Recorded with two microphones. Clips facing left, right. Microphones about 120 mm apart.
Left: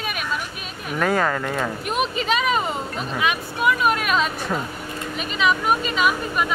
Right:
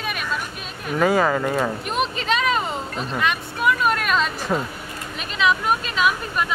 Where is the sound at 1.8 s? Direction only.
5° left (ahead or behind).